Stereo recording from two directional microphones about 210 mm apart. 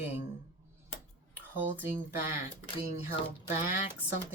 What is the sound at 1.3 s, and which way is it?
Speech, 10° right (ahead or behind).